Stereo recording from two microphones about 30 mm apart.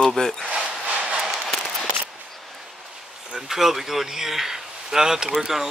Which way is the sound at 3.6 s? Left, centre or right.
Centre.